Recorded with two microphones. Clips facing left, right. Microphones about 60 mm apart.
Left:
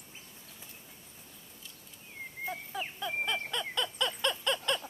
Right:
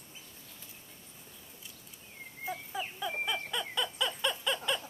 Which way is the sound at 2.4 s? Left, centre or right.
Centre.